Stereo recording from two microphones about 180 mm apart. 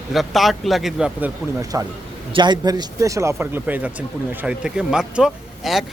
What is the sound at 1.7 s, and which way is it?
A man's voice, 20° right (ahead or behind).